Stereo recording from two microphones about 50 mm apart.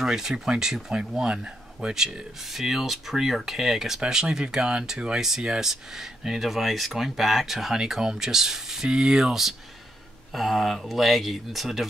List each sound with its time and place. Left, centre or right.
0.0 s speech: centre